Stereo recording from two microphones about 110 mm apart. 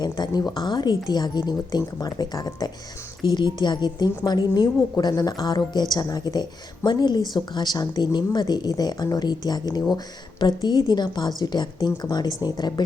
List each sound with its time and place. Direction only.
0.0 s a woman's voice: 40° left (ahead or behind)